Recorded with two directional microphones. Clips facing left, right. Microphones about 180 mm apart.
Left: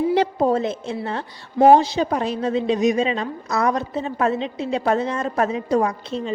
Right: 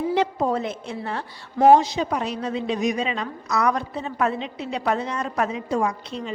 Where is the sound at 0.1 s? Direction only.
30° left (ahead or behind).